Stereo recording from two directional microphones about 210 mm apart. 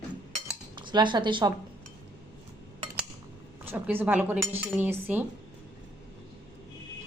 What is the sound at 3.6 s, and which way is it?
Speech, 10° right (ahead or behind).